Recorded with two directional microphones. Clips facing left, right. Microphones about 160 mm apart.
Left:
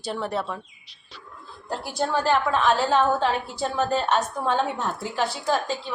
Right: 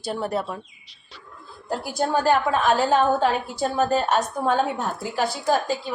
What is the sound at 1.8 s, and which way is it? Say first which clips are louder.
A woman's voice: right 3 dB; 10° right (ahead or behind).